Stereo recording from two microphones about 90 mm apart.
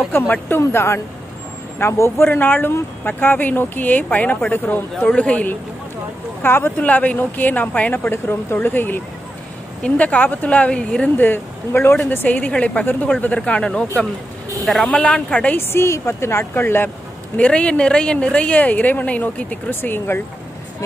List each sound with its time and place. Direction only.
0.7 s a woman's voice: 25° left (ahead or behind)
15.7 s speech: 30° left (ahead or behind)
17.4 s a woman's voice: 10° left (ahead or behind)